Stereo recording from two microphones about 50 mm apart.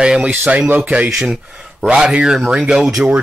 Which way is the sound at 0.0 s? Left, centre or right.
Centre.